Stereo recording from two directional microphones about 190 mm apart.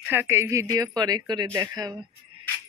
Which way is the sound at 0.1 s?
10° right (ahead or behind).